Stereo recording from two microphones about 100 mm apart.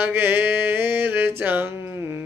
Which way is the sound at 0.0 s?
20° right (ahead or behind).